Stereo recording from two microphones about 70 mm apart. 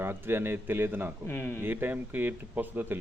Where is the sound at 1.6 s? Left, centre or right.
Right.